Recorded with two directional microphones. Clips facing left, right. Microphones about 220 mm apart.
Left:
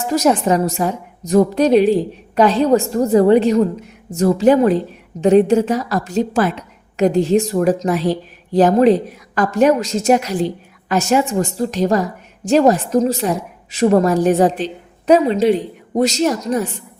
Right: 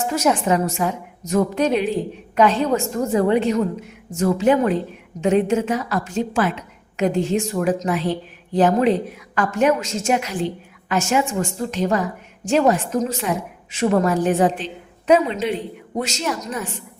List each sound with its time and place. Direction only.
0.1 s a woman's voice: 35° left (ahead or behind)